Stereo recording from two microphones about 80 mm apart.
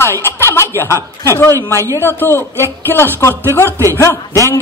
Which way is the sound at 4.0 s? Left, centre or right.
Left.